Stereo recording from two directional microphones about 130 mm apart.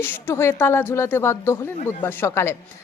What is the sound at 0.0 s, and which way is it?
Speech, 15° left (ahead or behind).